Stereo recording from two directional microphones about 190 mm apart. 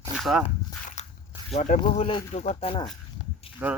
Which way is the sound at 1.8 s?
25° left (ahead or behind).